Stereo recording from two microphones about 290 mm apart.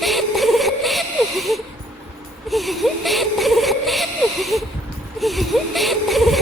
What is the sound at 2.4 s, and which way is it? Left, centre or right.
Speech, centre.